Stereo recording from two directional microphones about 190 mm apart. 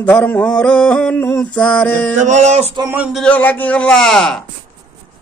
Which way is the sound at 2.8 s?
15° right (ahead or behind).